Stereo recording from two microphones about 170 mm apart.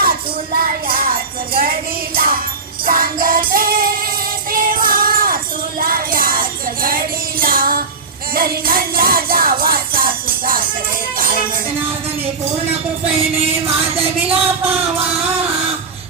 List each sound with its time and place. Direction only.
0.0 s music: 60° right (ahead or behind)
4.5 s jingle bell: 55° right (ahead or behind)
5.8 s music: 55° right (ahead or behind)
13.9 s music: 35° right (ahead or behind)